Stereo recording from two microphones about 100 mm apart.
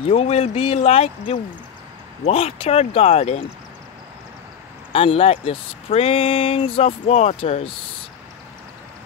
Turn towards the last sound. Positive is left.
turn(degrees=90)